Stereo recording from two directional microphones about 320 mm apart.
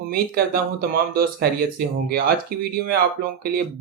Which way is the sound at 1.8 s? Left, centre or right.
Right.